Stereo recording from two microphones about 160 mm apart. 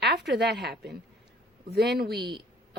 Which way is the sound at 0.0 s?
90° right.